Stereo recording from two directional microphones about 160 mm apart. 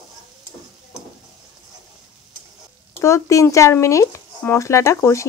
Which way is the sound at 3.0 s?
20° left (ahead or behind).